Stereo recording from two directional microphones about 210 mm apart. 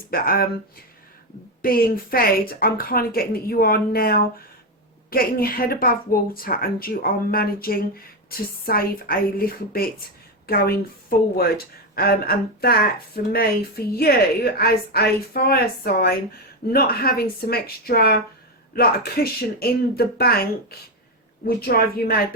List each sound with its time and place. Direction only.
0.1 s a woman's voice: 45° left (ahead or behind)
1.6 s a woman's voice: 45° left (ahead or behind)